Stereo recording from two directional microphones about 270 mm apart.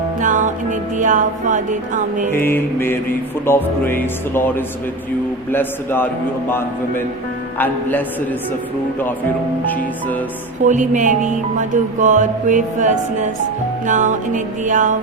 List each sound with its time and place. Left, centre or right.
0.2 s music: right
2.3 s speech: centre
10.7 s music: right